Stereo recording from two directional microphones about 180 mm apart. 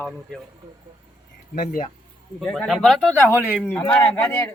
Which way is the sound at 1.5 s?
40° left (ahead or behind).